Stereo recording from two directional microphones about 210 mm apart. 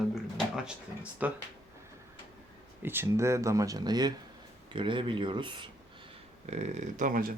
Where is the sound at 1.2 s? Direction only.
5° right (ahead or behind).